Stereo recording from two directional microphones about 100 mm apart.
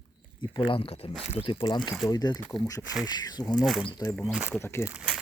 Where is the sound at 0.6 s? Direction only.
60° left (ahead or behind).